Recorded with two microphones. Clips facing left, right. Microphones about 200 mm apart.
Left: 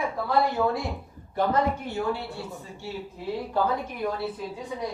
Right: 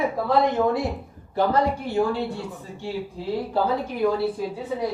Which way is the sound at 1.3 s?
30° right (ahead or behind).